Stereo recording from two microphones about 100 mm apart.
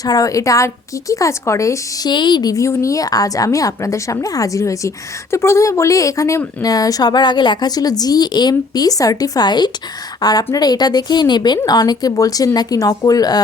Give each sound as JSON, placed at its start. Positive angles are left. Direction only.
{"t": 0.0, "sound": "speech", "side_deg": 35}
{"t": 2.0, "sound": "a woman's voice", "side_deg": 50}